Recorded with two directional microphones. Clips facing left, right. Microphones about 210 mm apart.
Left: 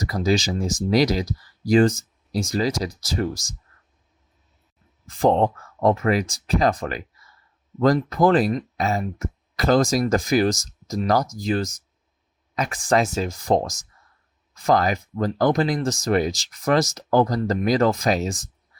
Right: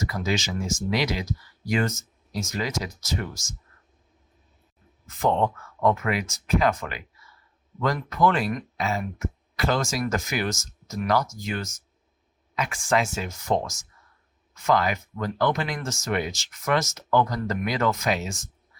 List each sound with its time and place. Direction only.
0.0 s speech: 35° left (ahead or behind)
5.0 s speech: 35° left (ahead or behind)